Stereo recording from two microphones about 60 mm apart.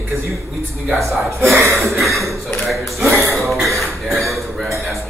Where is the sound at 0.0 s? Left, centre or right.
Right.